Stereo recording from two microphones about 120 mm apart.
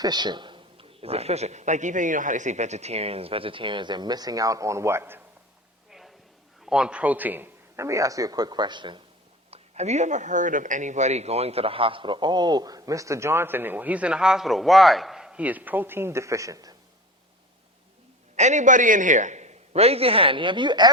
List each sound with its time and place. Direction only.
0.0 s a man's voice: 35° right (ahead or behind); by 5.2 s 20° right (ahead or behind)
5.9 s a sound: centre (ahead or behind)
6.6 s speech: 5° right (ahead or behind); by 9.0 s 40° right (ahead or behind)
9.5 s speech: 65° right (ahead or behind); by 16.7 s 30° right (ahead or behind)
18.3 s a man's voice: 85° right; by 20.9 s 40° right (ahead or behind)